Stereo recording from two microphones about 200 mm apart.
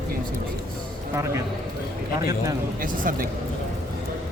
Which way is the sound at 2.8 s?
45° right (ahead or behind).